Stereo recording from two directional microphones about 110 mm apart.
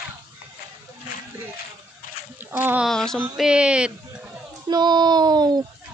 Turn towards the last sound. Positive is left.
turn(degrees=-40)  # may be behind; listen again after turning